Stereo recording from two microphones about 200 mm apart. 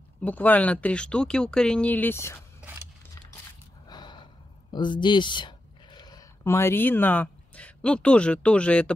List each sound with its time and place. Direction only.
0.2 s speech: 10° left (ahead or behind)
3.8 s gasp: 20° left (ahead or behind)
4.7 s speech: 25° left (ahead or behind); by 8.9 s 5° left (ahead or behind)